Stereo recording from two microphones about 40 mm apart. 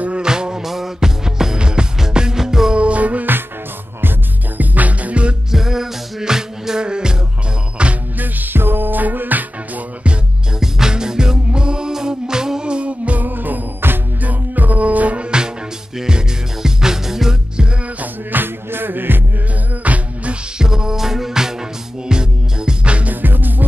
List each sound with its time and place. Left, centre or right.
0.2 s music: centre
2.7 s music: right
4.6 s music: right
5.5 s music: centre; by 7.9 s right
8.5 s music: right
10.6 s music: centre; by 13.2 s right
13.2 s music: right
14.2 s music: right; by 17.4 s centre
18.3 s music: right
19.8 s music: right
20.5 s music: centre
23.2 s music: right